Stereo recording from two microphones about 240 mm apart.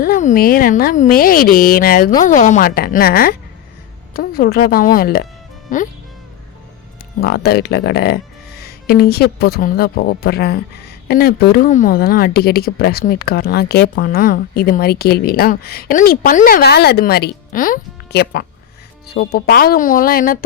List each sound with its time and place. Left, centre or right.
0.0 s speech: left
7.2 s speech: left